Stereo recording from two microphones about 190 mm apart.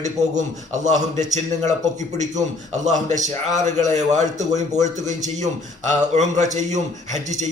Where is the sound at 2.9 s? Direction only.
40° right (ahead or behind).